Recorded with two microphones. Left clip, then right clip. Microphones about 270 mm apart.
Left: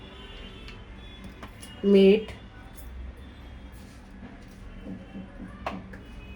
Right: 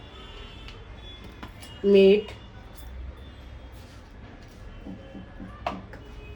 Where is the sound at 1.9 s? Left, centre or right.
Left.